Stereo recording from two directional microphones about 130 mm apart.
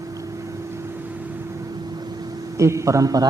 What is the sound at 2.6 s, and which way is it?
Speech, 25° right (ahead or behind).